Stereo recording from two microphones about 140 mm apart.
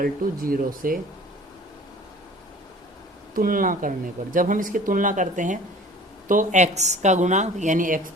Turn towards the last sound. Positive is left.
turn(degrees=-70)  # may be behind; listen again after turning